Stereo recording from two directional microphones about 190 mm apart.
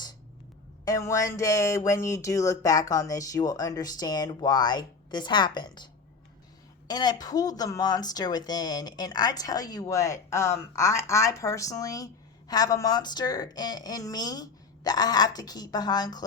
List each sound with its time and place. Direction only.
0.9 s speech: 15° left (ahead or behind)